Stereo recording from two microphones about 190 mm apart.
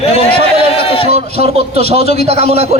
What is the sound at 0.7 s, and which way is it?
Speech, 30° left (ahead or behind).